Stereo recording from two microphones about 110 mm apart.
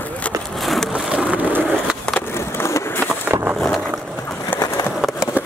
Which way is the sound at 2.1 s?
20° left (ahead or behind).